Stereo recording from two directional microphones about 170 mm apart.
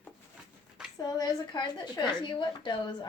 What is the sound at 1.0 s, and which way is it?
A woman's voice, 25° left (ahead or behind).